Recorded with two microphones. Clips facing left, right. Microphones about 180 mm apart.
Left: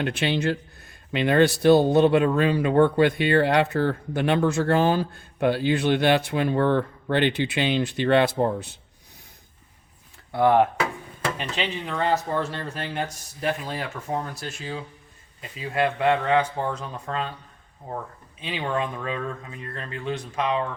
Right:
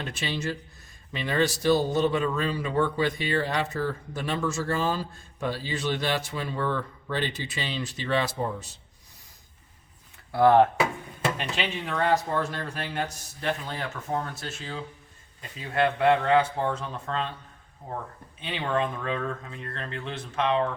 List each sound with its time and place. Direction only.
0.0 s speech: 65° left (ahead or behind)
10.3 s speech: 15° left (ahead or behind)
11.3 s speech: centre (ahead or behind)
18.3 s speech: 5° left (ahead or behind)